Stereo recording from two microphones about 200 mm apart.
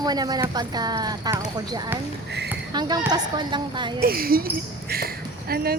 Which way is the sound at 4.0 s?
45° right (ahead or behind).